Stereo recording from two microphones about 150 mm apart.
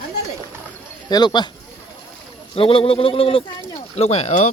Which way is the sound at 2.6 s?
40° left (ahead or behind).